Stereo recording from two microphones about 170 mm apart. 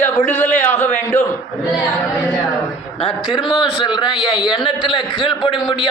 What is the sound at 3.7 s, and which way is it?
A man's voice, 30° left (ahead or behind).